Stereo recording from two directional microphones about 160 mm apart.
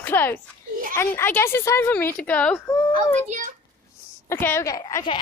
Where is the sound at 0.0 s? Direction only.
15° left (ahead or behind).